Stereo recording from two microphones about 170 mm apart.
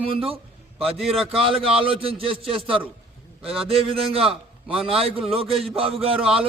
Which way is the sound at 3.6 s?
35° right (ahead or behind).